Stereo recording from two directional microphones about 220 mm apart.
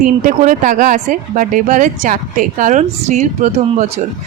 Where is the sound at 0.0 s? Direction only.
35° right (ahead or behind).